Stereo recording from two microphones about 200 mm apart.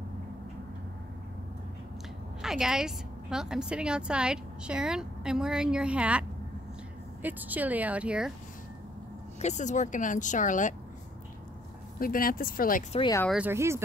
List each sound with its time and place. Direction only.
2.4 s a woman's voice: centre (ahead or behind)
9.4 s speech: 35° left (ahead or behind)
12.0 s speech: 45° left (ahead or behind)
13.3 s speech: 10° right (ahead or behind)